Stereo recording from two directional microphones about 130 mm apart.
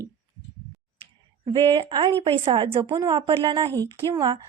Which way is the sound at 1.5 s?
40° right (ahead or behind).